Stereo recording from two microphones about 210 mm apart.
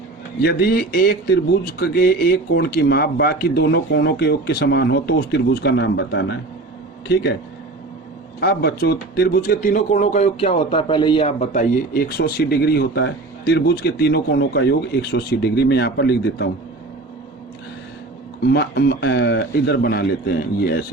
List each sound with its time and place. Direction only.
0.4 s speech: 45° left (ahead or behind)
8.4 s speech: 50° left (ahead or behind)
18.4 s speech: 50° left (ahead or behind)